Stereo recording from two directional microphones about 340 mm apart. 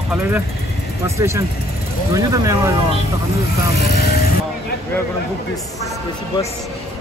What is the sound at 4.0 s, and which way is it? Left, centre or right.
Vehicle, left.